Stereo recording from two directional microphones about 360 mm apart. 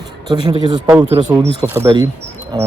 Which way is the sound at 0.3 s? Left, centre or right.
Centre.